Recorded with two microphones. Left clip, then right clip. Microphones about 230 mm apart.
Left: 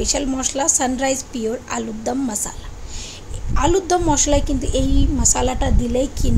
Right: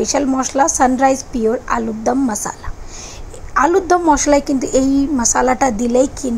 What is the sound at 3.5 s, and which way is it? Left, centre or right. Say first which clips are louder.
Speech: right 5 dB; centre.